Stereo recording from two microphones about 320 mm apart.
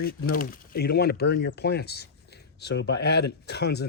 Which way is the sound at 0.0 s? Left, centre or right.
Left.